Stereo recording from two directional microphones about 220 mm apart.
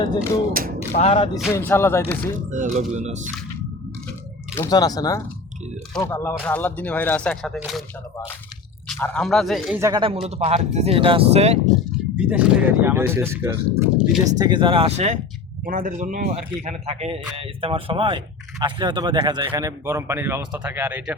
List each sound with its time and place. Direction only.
0.0 s speech: 20° left (ahead or behind)
1.5 s speech: 10° left (ahead or behind)
2.5 s speech: 35° right (ahead or behind)
4.5 s speech: 15° left (ahead or behind)
8.9 s speech: 5° left (ahead or behind)
9.8 s speech: 20° right (ahead or behind)
12.1 s a man's voice: 5° right (ahead or behind)
14.3 s a man's voice: 20° right (ahead or behind)